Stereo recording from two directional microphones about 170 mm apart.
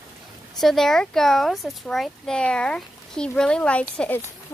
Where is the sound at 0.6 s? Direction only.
Centre (ahead or behind).